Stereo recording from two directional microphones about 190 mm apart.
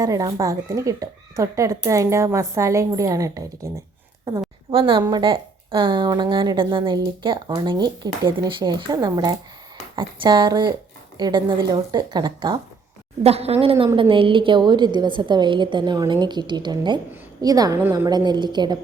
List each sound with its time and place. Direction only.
0.0 s speech: 20° right (ahead or behind)
4.7 s speech: 25° right (ahead or behind)
13.2 s speech: 35° right (ahead or behind)